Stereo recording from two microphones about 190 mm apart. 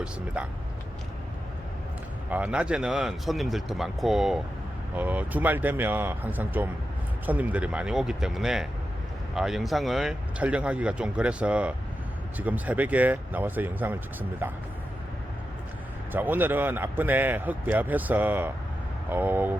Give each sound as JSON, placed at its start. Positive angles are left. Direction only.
{"t": 0.4, "sound": "a man's voice", "side_deg": -5}
{"t": 2.3, "sound": "a man's voice", "side_deg": -5}
{"t": 16.1, "sound": "a man's voice", "side_deg": -10}